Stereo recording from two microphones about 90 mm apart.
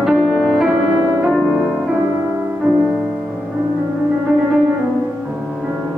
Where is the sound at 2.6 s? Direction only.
15° right (ahead or behind).